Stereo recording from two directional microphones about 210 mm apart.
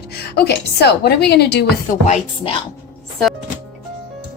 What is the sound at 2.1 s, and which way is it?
Speech, 30° left (ahead or behind).